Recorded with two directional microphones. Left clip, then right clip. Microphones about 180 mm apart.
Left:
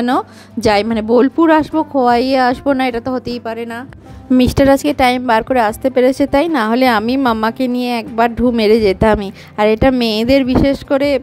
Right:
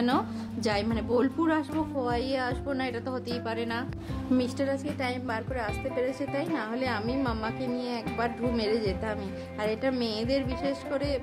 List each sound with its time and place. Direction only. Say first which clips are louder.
0.0 s a woman's voice: left 12 dB; 45° left (ahead or behind)